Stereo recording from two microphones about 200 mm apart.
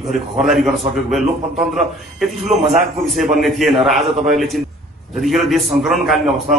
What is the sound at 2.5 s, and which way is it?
Speech, 30° right (ahead or behind).